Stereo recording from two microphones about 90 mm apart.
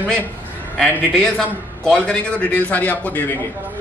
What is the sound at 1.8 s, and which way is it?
A man's voice, 10° left (ahead or behind).